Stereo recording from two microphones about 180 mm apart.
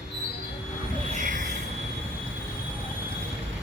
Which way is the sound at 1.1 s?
45° right (ahead or behind).